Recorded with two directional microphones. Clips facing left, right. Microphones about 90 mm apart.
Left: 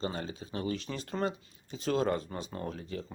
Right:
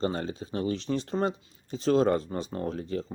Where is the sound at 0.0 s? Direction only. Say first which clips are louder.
Right 6 dB; 40° right (ahead or behind).